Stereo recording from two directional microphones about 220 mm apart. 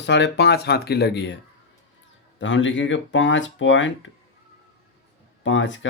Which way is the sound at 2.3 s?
60° left (ahead or behind).